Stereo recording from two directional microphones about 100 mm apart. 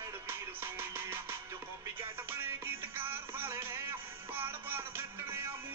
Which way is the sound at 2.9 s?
20° right (ahead or behind).